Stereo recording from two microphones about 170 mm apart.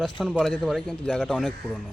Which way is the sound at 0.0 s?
Centre (ahead or behind).